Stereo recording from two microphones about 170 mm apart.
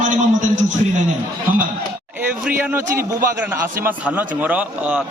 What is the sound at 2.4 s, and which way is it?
A man's voice, 5° right (ahead or behind).